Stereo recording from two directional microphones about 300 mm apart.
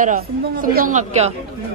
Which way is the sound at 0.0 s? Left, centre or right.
Right.